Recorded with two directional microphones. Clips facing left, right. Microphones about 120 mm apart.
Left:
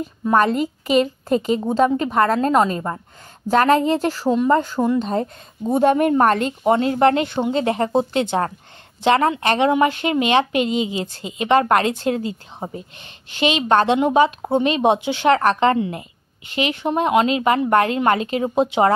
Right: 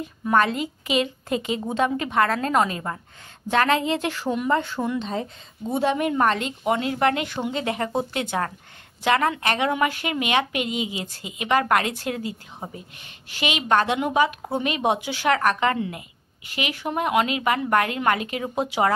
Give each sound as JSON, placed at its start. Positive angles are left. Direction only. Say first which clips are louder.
{"t": 0.3, "sound": "speech", "louder": "left 4 dB", "side_deg": 40}
{"t": 3.4, "sound": "speech", "louder": "left 5 dB", "side_deg": 40}